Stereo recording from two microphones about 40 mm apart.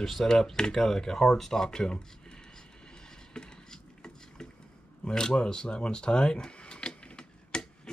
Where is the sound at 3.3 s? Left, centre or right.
Centre.